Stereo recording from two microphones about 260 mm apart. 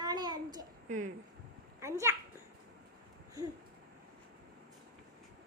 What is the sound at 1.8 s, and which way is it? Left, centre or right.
Children playing, centre.